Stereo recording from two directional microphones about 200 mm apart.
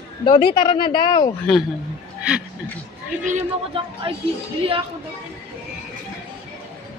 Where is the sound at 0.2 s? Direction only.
25° left (ahead or behind).